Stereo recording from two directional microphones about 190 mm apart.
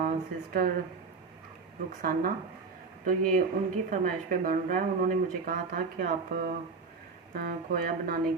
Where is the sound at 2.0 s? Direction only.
45° right (ahead or behind).